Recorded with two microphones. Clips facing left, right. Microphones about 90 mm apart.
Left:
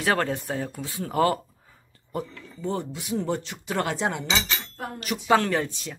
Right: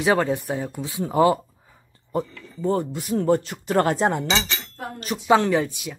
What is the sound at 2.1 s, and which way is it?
Speech, 40° right (ahead or behind).